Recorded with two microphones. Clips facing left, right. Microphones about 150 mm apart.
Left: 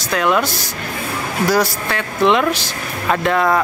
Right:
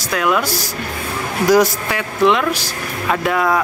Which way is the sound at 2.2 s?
Centre (ahead or behind).